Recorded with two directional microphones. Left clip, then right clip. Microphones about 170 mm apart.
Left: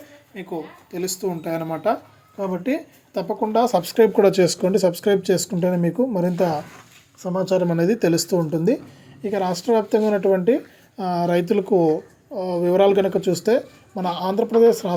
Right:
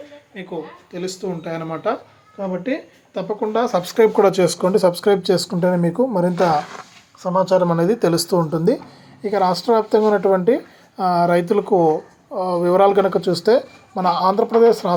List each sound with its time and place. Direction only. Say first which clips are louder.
0.4 s speech: right 1 dB; 40° left (ahead or behind)
7.2 s speech: right 5 dB; 40° left (ahead or behind)
7.6 s speech: right 3 dB; 30° left (ahead or behind)